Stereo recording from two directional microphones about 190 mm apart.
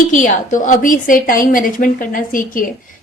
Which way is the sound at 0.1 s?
40° left (ahead or behind).